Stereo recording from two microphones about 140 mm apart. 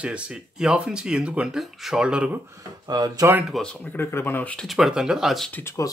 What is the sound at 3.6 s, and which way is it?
Speech, 10° left (ahead or behind).